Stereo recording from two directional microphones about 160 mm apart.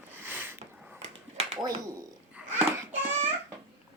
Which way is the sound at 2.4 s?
10° right (ahead or behind).